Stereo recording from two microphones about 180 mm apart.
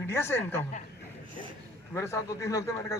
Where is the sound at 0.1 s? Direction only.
15° left (ahead or behind).